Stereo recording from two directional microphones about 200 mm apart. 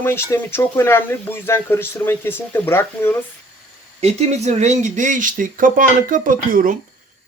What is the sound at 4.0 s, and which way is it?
Speech, 35° right (ahead or behind).